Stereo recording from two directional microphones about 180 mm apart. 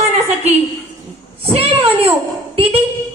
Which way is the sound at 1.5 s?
30° right (ahead or behind).